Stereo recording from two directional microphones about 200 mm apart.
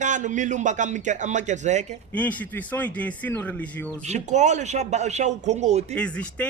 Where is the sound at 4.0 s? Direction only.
35° right (ahead or behind).